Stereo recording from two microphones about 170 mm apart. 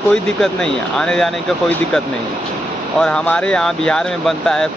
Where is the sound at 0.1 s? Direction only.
5° left (ahead or behind).